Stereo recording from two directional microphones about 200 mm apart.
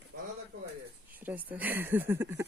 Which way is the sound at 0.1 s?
55° right (ahead or behind).